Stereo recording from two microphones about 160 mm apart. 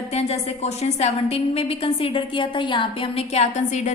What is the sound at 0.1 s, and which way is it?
A woman's voice, 40° left (ahead or behind).